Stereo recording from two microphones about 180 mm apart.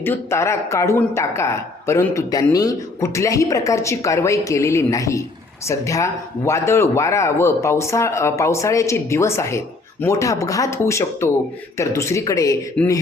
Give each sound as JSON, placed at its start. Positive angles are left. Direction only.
{"t": 0.0, "sound": "speech", "side_deg": 15}
{"t": 12.8, "sound": "speech", "side_deg": 10}